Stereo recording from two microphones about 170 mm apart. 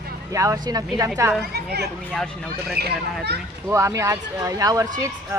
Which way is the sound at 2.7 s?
70° right (ahead or behind).